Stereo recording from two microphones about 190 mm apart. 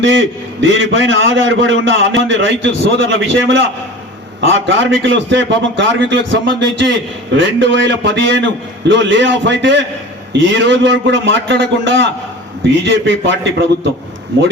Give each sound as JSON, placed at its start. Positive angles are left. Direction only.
{"t": 0.0, "sound": "a man's voice", "side_deg": -80}